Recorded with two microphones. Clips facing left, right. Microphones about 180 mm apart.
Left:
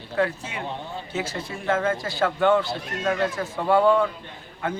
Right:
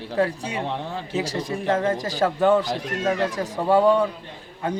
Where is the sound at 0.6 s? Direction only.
90° right.